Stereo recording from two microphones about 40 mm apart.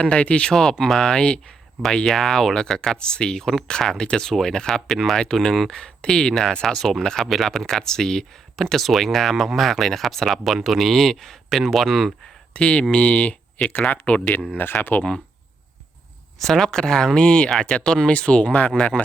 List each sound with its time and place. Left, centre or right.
0.0 s speech: left
0.4 s speech: centre
12.5 s speech: left
14.6 s speech: left
16.4 s speech: centre; by 19.0 s left